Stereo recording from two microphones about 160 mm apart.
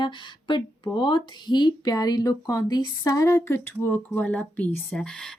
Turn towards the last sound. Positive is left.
turn(degrees=5)  # may be behind; listen again after turning